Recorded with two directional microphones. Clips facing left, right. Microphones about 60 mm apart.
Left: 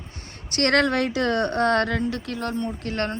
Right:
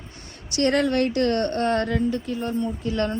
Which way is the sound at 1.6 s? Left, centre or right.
Left.